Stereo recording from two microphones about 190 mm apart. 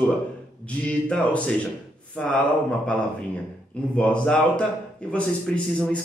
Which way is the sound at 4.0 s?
5° left (ahead or behind).